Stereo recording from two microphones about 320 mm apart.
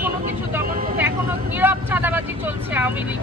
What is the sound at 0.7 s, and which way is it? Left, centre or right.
Vehicle, right.